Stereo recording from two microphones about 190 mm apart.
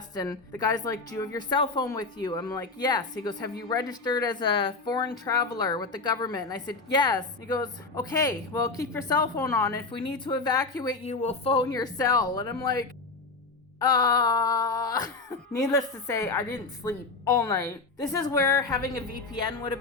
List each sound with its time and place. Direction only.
0.1 s a woman's voice: 20° left (ahead or behind)
11.0 s a woman's voice: 35° left (ahead or behind); by 18.6 s 20° left (ahead or behind)